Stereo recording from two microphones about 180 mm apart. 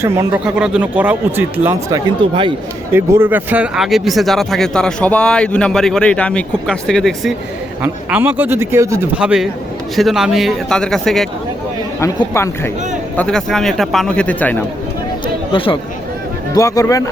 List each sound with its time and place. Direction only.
0.0 s speech: 15° right (ahead or behind)
2.2 s speech: 30° right (ahead or behind)
2.9 s speech: 10° right (ahead or behind)
7.8 s speech: 10° right (ahead or behind)
9.1 s speech: 5° right (ahead or behind)
11.9 s speech: 15° left (ahead or behind)
13.1 s speech: 5° left (ahead or behind)
15.5 s speech: 30° left (ahead or behind)
16.6 s speech: 20° left (ahead or behind)